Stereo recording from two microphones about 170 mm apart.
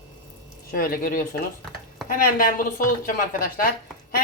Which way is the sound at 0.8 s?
60° left (ahead or behind).